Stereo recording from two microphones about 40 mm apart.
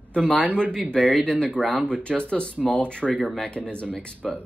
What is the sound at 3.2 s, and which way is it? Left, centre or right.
Speech, centre.